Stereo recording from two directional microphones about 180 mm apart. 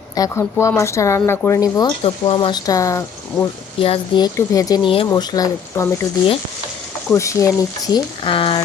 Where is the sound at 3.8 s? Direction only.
30° left (ahead or behind).